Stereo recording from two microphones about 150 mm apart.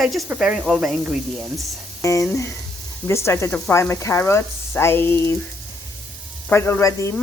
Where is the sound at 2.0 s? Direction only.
20° left (ahead or behind).